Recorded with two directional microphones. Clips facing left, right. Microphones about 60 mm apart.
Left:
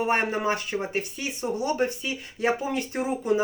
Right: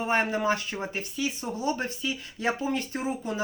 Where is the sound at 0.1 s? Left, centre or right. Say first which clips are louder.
Left 1 dB; left.